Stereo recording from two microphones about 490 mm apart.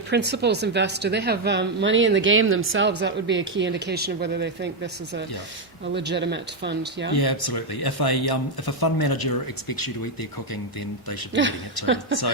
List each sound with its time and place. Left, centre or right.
0.1 s speech: centre
7.1 s speech: left
11.3 s speech: right